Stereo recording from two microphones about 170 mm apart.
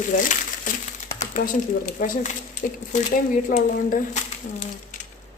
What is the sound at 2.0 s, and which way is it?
Speech, 60° left (ahead or behind).